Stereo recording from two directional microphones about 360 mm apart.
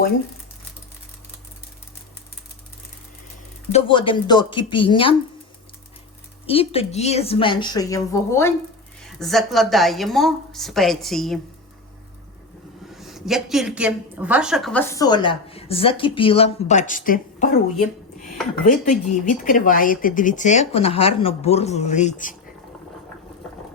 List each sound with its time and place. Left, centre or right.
3.7 s a woman's voice: centre
6.5 s a woman's voice: centre
12.9 s a woman's voice: centre; by 17.5 s left
18.6 s speech: left